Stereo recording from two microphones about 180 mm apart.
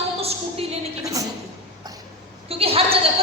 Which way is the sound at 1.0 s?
20° right (ahead or behind).